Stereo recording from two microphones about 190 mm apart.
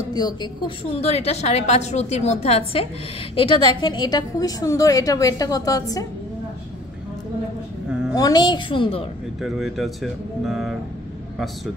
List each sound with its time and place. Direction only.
0.1 s a woman's voice: 20° left (ahead or behind)
8.1 s a woman's voice: 20° left (ahead or behind)
9.4 s speech: centre (ahead or behind)